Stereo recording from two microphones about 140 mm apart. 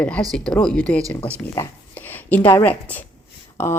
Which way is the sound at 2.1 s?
15° left (ahead or behind).